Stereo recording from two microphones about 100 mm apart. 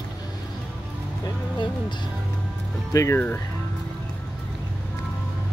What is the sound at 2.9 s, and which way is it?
Speech, 30° left (ahead or behind).